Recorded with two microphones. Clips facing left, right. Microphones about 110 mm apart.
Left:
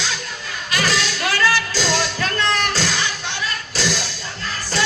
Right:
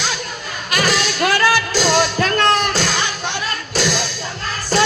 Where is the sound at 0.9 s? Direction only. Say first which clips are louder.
Right 4 dB; 45° right (ahead or behind).